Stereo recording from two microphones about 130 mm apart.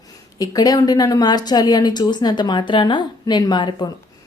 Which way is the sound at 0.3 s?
30° left (ahead or behind).